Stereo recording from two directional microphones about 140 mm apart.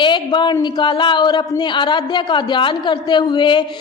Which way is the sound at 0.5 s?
30° left (ahead or behind).